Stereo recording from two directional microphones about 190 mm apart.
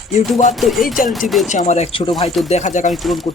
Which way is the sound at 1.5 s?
40° left (ahead or behind).